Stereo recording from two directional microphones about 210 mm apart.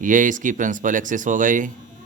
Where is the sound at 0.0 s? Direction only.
40° right (ahead or behind).